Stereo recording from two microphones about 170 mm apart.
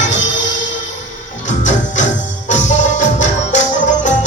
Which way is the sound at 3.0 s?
45° left (ahead or behind).